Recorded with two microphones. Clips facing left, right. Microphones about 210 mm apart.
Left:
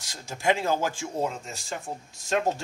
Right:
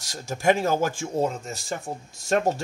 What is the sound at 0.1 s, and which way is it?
Speech, 45° right (ahead or behind).